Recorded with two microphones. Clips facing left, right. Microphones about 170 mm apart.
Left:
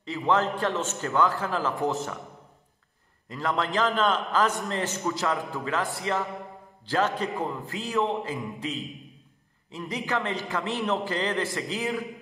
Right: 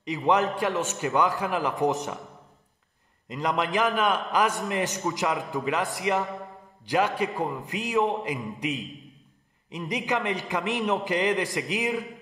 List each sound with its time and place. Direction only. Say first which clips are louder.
0.0 s a man's voice: right 1 dB; 15° right (ahead or behind)
3.3 s a man's voice: right 1 dB; 15° right (ahead or behind)